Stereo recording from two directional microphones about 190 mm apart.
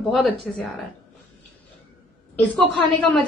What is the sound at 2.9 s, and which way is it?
Speech, centre (ahead or behind).